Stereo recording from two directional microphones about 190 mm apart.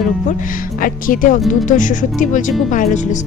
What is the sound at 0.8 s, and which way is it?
A woman's voice, 45° left (ahead or behind).